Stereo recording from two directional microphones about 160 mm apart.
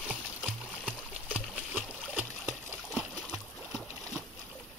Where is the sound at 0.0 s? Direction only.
5° right (ahead or behind).